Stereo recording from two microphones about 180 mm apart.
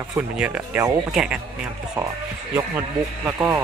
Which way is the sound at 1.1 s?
5° right (ahead or behind).